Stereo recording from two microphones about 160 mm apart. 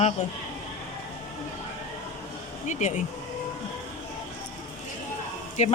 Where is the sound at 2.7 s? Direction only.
50° left (ahead or behind).